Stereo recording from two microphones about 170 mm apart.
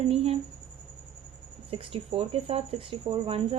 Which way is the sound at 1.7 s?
35° right (ahead or behind).